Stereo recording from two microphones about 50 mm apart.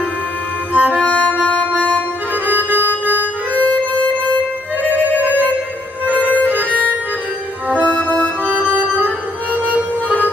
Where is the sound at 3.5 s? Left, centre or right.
Left.